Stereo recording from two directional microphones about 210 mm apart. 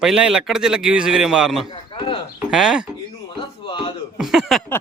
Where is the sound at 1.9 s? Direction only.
25° left (ahead or behind).